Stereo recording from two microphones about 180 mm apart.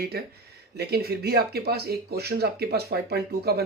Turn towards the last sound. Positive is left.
turn(degrees=-60)  # may be behind; listen again after turning